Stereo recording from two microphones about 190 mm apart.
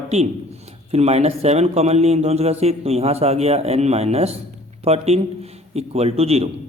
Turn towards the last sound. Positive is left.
turn(degrees=-30)  # may be behind; listen again after turning